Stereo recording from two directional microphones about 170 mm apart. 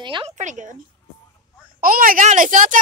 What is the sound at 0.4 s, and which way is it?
Speech, 45° right (ahead or behind).